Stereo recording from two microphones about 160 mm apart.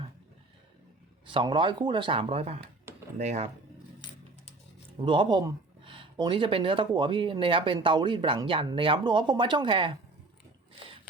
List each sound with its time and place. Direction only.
1.3 s speech: 30° right (ahead or behind)
4.9 s speech: 30° right (ahead or behind)